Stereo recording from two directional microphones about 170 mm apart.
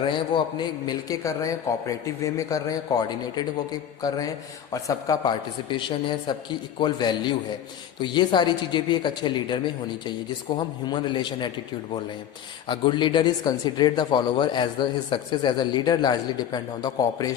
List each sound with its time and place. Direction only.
0.0 s speech: 30° left (ahead or behind)
4.7 s speech: 20° left (ahead or behind)
12.6 s speech: 30° left (ahead or behind)